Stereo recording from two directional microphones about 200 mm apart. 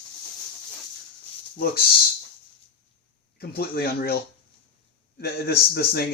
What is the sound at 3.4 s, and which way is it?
Speech, 50° left (ahead or behind).